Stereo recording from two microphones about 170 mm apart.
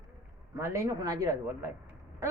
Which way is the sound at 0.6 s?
15° right (ahead or behind).